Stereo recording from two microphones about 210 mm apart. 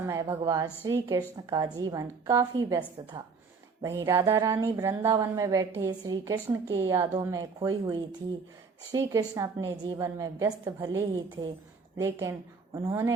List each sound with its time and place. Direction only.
0.0 s speech: 10° right (ahead or behind)
3.8 s a woman's voice: 15° right (ahead or behind)